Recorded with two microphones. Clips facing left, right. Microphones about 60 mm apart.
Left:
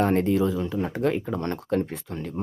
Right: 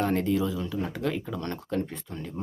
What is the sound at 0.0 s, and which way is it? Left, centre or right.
Speech, left.